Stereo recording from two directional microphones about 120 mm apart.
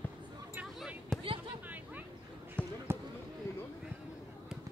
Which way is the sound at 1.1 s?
5° left (ahead or behind).